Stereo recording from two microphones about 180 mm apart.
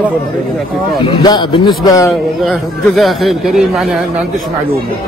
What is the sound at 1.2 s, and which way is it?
Speech, 25° left (ahead or behind).